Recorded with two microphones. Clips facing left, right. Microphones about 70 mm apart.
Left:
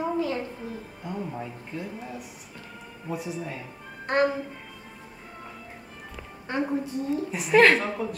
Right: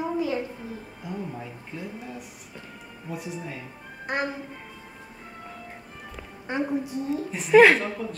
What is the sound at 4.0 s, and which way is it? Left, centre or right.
Speech, centre.